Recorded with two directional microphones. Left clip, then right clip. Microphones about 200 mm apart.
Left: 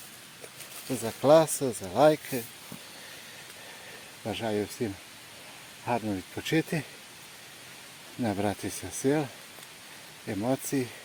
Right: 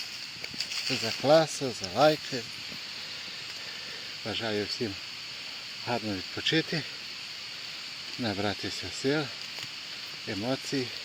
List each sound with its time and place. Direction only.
1.0 s speech: 20° left (ahead or behind)
4.3 s speech: 20° left (ahead or behind)
5.9 s speech: 20° left (ahead or behind)
8.2 s speech: 25° left (ahead or behind)